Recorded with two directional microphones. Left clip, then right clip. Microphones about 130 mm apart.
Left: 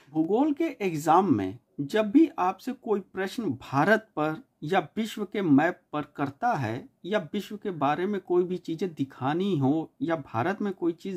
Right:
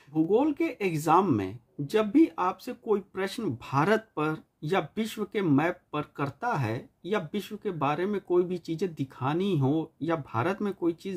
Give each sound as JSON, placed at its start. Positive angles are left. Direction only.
{"t": 0.3, "sound": "speech", "side_deg": 30}